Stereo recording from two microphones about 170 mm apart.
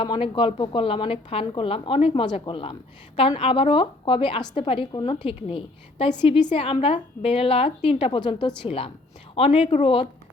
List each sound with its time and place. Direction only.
0.0 s a woman's voice: 30° left (ahead or behind)